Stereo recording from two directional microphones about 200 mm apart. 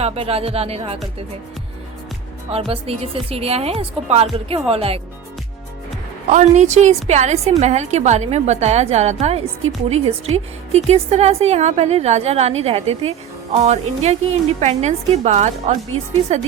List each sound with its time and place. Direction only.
0.0 s a woman's voice: 30° right (ahead or behind)
2.5 s a woman's voice: 30° right (ahead or behind)
6.3 s a woman's voice: 35° right (ahead or behind)